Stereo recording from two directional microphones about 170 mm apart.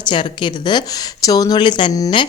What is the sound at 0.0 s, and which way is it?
Speech, 30° left (ahead or behind).